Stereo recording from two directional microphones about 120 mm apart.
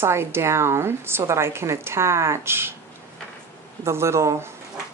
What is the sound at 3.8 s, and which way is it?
Speech, 20° right (ahead or behind).